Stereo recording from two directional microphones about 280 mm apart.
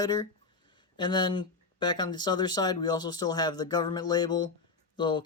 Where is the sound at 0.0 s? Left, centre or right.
Centre.